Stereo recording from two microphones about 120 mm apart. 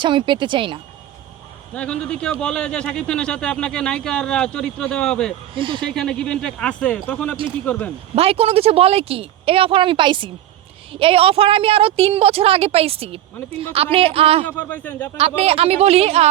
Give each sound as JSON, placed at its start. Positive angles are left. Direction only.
{"t": 0.0, "sound": "speech", "side_deg": -40}
{"t": 1.7, "sound": "a man's voice", "side_deg": 10}
{"t": 5.5, "sound": "speech", "side_deg": -45}
{"t": 5.8, "sound": "a man's voice", "side_deg": 5}
{"t": 8.1, "sound": "speech", "side_deg": -55}
{"t": 11.0, "sound": "speech", "side_deg": -55}
{"t": 14.4, "sound": "a man's voice", "side_deg": 15}
{"t": 15.4, "sound": "a woman's voice", "side_deg": -55}